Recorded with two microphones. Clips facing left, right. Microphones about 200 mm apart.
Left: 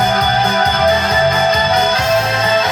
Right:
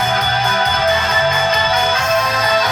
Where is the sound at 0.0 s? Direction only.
35° left (ahead or behind).